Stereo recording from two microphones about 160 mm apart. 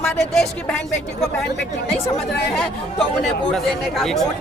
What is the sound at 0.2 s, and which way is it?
Speech, 5° left (ahead or behind).